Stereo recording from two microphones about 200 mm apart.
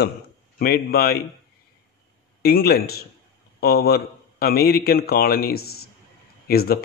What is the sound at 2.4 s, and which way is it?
Speech, 50° left (ahead or behind).